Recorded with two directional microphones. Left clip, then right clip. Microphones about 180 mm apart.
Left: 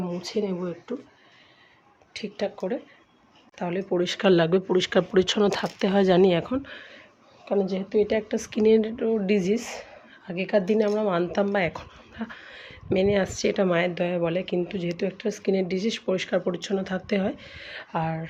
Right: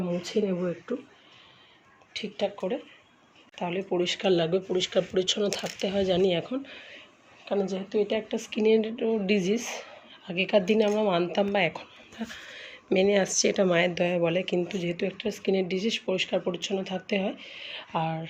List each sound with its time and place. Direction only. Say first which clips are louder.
0.1 s speech: right 2 dB; 5° right (ahead or behind)
2.1 s speech: even; 15° left (ahead or behind)
3.8 s speech: left 2 dB; 20° left (ahead or behind)
4.1 s speech: left 5 dB; 35° left (ahead or behind); by 18.3 s 10° left (ahead or behind)